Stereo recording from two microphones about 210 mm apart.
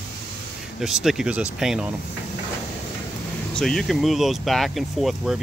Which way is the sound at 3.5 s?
Centre (ahead or behind).